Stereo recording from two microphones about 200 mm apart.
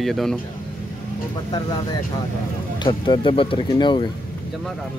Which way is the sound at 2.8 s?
25° left (ahead or behind).